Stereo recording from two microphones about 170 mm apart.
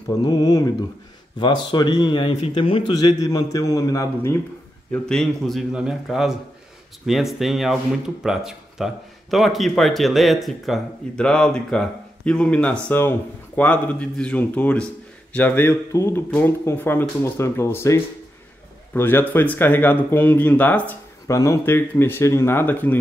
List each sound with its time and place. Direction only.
0.2 s a man's voice: 20° left (ahead or behind)
4.9 s speech: 5° left (ahead or behind)